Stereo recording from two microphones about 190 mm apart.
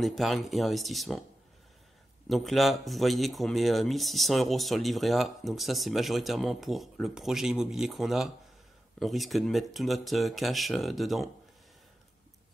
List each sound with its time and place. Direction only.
0.0 s speech: centre (ahead or behind)
2.2 s speech: centre (ahead or behind)